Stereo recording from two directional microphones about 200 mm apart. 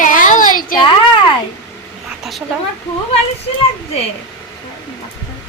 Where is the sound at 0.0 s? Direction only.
40° left (ahead or behind).